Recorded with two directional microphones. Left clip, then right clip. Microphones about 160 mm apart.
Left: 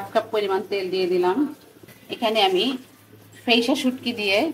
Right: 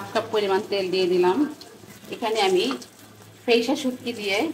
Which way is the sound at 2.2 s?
45° left (ahead or behind).